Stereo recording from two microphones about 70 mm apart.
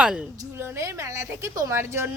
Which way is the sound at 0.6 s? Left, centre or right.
Right.